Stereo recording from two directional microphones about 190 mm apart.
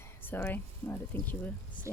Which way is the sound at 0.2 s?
10° left (ahead or behind).